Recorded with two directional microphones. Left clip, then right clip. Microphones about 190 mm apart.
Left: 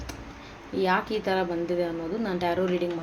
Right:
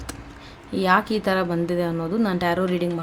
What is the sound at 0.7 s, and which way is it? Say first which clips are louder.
A woman's voice: right 5 dB; 40° right (ahead or behind).